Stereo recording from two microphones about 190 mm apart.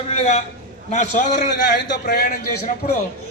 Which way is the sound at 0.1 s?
35° left (ahead or behind).